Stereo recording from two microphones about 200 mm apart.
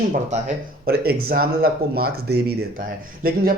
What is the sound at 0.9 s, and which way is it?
Speech, 50° right (ahead or behind).